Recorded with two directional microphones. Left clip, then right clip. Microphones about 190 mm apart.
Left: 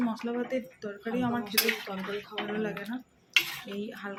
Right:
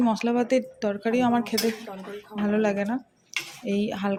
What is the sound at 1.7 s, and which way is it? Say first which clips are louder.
Speech: left 2 dB; centre (ahead or behind).